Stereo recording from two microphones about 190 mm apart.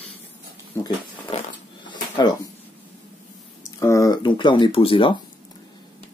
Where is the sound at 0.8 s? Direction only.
25° left (ahead or behind).